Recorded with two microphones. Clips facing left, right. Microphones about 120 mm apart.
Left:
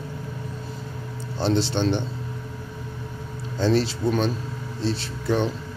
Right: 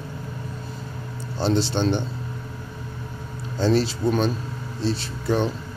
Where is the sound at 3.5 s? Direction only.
40° right (ahead or behind).